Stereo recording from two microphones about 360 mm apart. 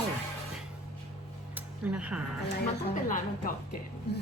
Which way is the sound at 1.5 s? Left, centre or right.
Centre.